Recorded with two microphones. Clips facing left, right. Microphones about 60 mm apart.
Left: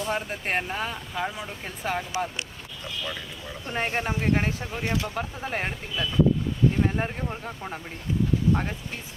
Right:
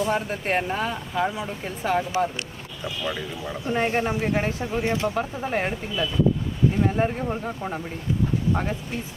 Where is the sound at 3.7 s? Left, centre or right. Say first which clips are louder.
Right 4 dB; centre.